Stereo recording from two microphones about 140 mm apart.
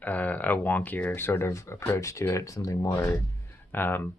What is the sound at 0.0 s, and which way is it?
Speech, 10° left (ahead or behind).